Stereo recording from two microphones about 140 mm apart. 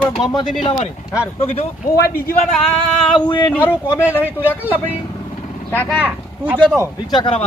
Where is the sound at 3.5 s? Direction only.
15° left (ahead or behind).